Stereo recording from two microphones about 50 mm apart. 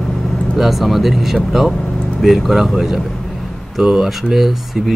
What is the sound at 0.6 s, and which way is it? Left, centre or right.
Speech, centre.